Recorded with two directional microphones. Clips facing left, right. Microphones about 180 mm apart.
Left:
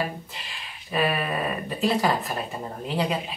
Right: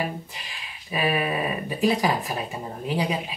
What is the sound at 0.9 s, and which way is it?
Speech, 10° right (ahead or behind).